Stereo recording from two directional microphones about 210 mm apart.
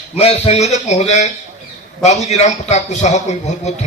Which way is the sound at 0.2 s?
30° left (ahead or behind).